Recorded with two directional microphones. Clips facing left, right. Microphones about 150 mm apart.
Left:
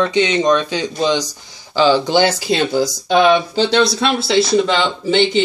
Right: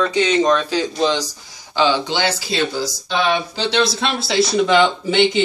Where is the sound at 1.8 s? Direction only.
40° left (ahead or behind).